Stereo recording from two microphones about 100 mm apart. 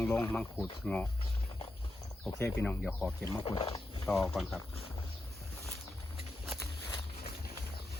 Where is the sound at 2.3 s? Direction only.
25° left (ahead or behind).